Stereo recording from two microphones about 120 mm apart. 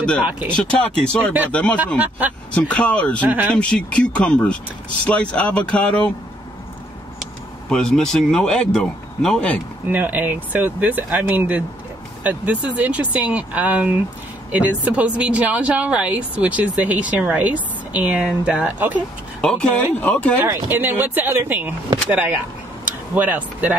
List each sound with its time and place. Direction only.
0.2 s speech: 10° right (ahead or behind)
1.0 s speech: 5° left (ahead or behind)
2.0 s speech: 15° right (ahead or behind)
2.5 s speech: 10° left (ahead or behind)
3.3 s speech: 15° right (ahead or behind)
3.5 s speech: 10° left (ahead or behind)
7.7 s speech: 5° left (ahead or behind)
9.8 s speech: 15° right (ahead or behind)
19.4 s speech: 5° left (ahead or behind)
20.3 s speech: 20° right (ahead or behind)
23.1 s speech: 15° right (ahead or behind)